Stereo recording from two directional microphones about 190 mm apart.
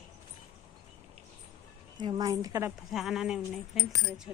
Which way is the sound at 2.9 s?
Centre (ahead or behind).